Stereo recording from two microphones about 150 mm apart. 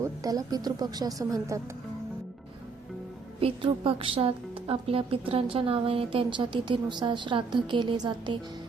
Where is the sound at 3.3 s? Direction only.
40° right (ahead or behind).